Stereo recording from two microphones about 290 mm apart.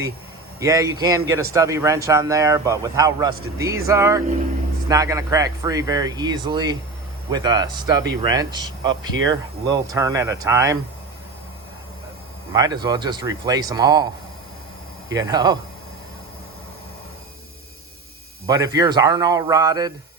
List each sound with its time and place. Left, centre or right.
0.6 s a man's voice: centre
8.9 s speech: right
9.3 s a man's voice: centre
12.5 s a man's voice: centre
15.1 s a man's voice: centre
18.4 s a man's voice: centre